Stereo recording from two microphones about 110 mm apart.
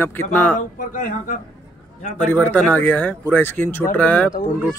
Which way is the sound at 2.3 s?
15° left (ahead or behind).